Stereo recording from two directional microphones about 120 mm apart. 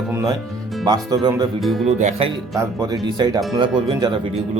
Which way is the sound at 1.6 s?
Centre (ahead or behind).